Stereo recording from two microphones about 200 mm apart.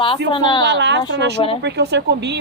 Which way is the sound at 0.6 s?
60° right (ahead or behind).